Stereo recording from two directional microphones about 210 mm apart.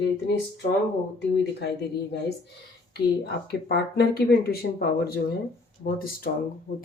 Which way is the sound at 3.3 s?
50° left (ahead or behind).